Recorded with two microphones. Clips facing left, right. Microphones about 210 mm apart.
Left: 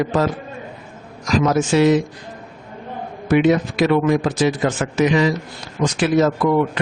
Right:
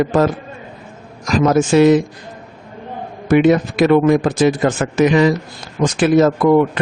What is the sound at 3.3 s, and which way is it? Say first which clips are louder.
Speech: right 3 dB; 50° right (ahead or behind).